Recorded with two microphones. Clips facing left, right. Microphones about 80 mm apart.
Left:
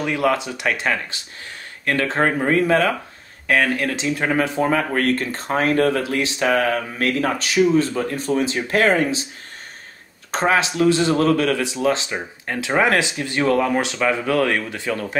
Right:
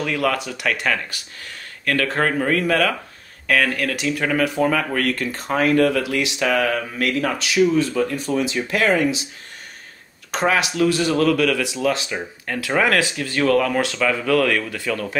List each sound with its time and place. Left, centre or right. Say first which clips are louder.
0.0 s speech: left 2 dB; left
10.3 s speech: left 1 dB; left